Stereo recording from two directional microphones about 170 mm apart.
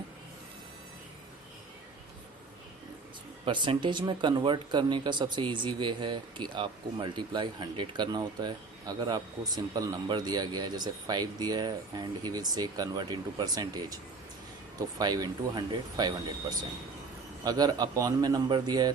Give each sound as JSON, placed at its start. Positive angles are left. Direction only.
{"t": 3.4, "sound": "speech", "side_deg": -30}